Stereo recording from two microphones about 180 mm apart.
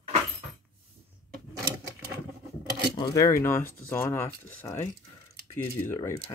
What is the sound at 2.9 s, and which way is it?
Speech, 25° left (ahead or behind).